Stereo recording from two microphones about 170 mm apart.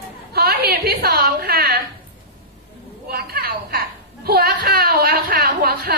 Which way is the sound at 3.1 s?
65° right (ahead or behind).